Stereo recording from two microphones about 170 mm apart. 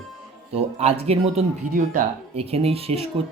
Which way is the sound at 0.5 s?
40° right (ahead or behind).